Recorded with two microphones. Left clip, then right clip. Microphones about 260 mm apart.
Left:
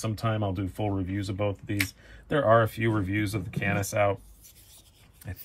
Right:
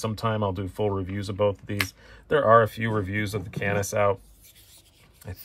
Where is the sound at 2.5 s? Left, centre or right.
Right.